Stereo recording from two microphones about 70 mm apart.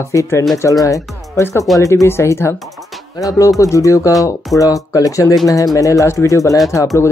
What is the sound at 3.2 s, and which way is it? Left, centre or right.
Speech, left.